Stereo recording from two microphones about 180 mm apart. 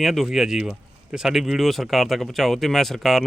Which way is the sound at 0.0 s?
Centre (ahead or behind).